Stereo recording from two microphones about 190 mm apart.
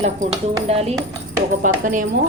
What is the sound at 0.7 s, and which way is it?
A woman's voice, 35° right (ahead or behind).